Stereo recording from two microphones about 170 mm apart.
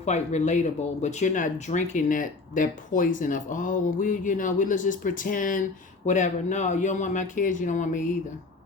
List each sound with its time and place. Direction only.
0.0 s speech: 40° left (ahead or behind)